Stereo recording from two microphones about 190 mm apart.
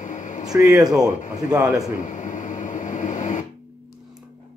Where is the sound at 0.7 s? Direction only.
5° right (ahead or behind).